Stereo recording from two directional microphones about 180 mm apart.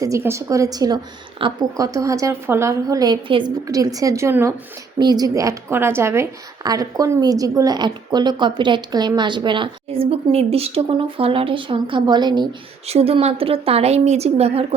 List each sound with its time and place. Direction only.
0.0 s a woman's voice: 15° right (ahead or behind); by 14.8 s 35° right (ahead or behind)